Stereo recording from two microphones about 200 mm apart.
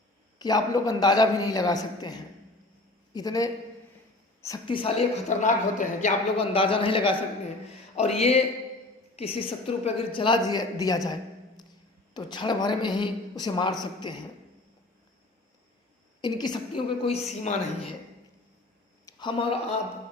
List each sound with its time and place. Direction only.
0.3 s a woman's voice: 20° left (ahead or behind)
16.2 s a woman's voice: 20° left (ahead or behind)
19.0 s a sound: 25° left (ahead or behind)